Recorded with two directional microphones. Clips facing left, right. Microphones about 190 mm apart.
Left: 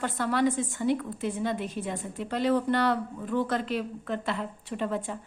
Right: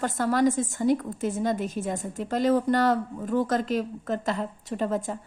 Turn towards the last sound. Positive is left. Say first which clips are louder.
# right 3 dB
turn(degrees=-40)  # may be behind; listen again after turning